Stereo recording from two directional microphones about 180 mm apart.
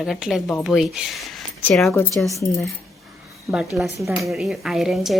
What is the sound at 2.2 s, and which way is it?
Speech, 15° left (ahead or behind).